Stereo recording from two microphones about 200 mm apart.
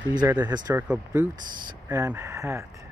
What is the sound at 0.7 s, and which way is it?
Speech, 10° right (ahead or behind).